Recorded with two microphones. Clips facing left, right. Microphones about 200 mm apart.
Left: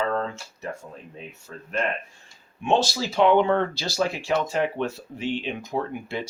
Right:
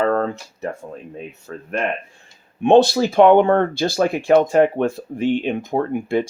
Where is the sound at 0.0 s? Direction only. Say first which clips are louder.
Right 7 dB; 55° right (ahead or behind).